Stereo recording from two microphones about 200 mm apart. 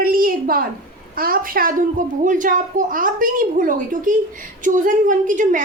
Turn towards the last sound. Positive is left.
turn(degrees=-40)  # may be behind; listen again after turning